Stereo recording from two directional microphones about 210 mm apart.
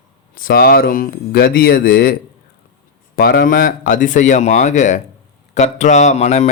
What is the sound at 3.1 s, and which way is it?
Speech, 50° left (ahead or behind).